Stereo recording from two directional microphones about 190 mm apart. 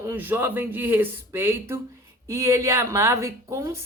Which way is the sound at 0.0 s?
10° right (ahead or behind).